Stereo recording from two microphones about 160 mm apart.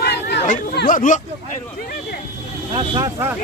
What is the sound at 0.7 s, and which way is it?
Speech, 55° left (ahead or behind).